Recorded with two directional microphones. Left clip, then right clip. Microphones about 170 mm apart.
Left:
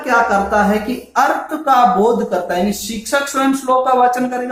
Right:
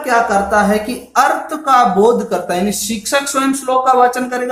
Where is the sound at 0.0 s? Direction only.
20° right (ahead or behind).